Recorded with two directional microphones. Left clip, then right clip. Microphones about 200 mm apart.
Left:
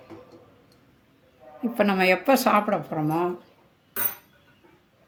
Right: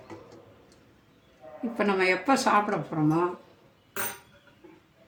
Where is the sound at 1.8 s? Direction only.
50° left (ahead or behind).